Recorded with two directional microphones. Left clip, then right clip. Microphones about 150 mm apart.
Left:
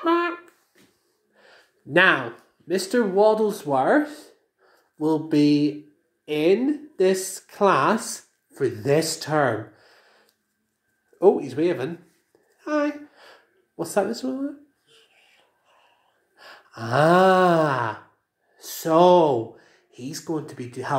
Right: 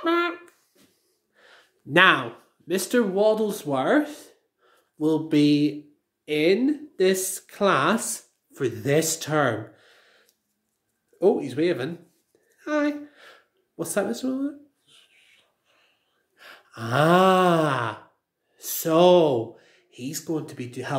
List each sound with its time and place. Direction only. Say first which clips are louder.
0.0 s a sound: left 2 dB; 15° right (ahead or behind)
1.3 s speech: left 1 dB; 20° right (ahead or behind)
9.8 s gasp: left 1 dB; 15° right (ahead or behind)
11.1 s speech: left 3 dB; 15° right (ahead or behind)
12.5 s a sound: left 1 dB; 15° right (ahead or behind)
16.3 s gasp: left 2 dB; 20° right (ahead or behind)
18.6 s speech: left 2 dB; 25° right (ahead or behind)